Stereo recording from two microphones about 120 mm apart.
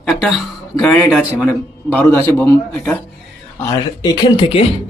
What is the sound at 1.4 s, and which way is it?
A man's voice, 15° left (ahead or behind).